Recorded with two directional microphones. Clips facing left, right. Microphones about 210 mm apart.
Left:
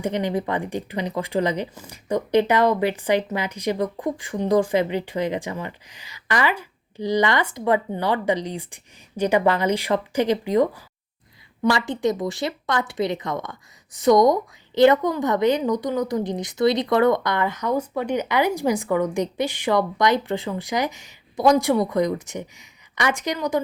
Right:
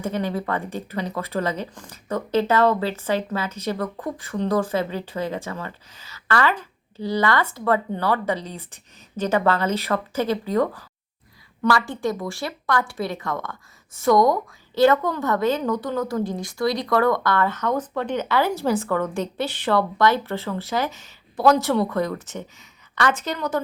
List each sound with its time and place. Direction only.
0.0 s a woman's voice: 15° left (ahead or behind)